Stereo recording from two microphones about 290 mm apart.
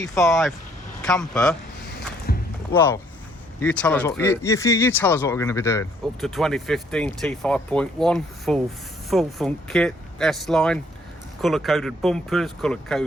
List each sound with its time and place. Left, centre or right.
0.0 s speech: centre
2.3 s a sound: left
2.7 s speech: centre